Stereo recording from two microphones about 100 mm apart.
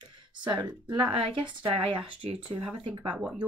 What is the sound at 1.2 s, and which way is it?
Speech, 60° right (ahead or behind).